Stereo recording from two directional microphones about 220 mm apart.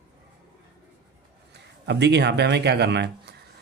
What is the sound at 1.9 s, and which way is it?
Speech, 50° right (ahead or behind).